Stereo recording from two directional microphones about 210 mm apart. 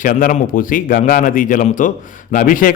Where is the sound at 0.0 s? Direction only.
40° left (ahead or behind).